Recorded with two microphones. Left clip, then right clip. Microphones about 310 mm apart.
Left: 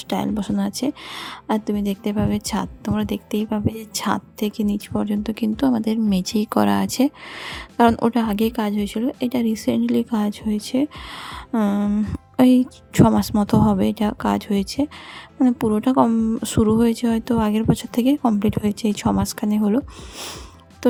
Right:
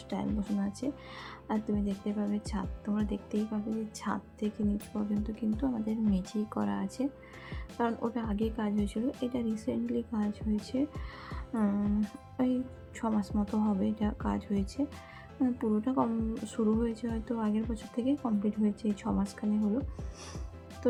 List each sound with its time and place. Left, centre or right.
0.1 s speech: left